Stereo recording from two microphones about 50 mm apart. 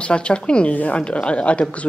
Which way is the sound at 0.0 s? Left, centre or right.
Left.